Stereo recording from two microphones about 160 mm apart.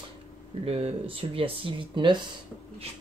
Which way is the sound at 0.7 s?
35° right (ahead or behind).